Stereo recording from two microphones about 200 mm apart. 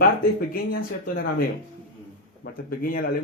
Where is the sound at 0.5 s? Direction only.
45° left (ahead or behind).